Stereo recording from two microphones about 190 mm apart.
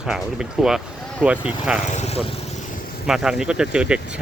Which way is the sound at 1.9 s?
35° left (ahead or behind).